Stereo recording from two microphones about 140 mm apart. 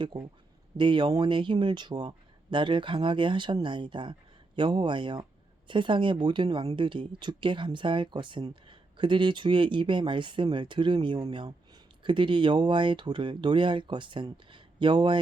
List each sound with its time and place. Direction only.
0.8 s speech: 35° right (ahead or behind)